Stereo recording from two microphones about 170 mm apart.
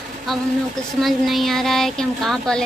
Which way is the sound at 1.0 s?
Centre (ahead or behind).